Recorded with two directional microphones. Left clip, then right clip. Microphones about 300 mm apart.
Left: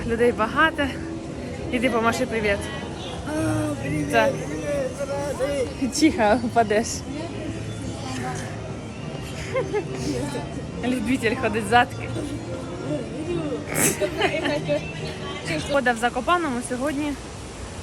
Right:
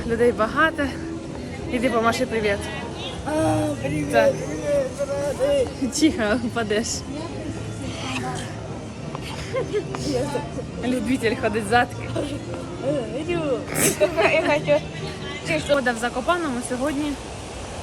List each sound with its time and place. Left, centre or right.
0.0 s speech: centre
9.5 s speech: centre
13.7 s speech: centre
15.7 s speech: centre